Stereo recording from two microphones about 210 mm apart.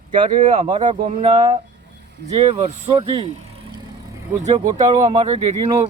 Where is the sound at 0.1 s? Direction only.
25° right (ahead or behind).